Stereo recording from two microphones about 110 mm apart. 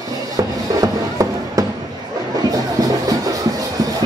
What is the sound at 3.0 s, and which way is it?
Music, 30° right (ahead or behind).